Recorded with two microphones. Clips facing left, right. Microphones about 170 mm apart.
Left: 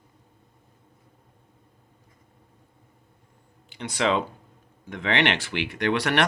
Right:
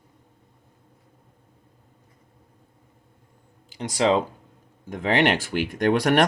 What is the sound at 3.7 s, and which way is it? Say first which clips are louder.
Speech: right 4 dB; 40° right (ahead or behind).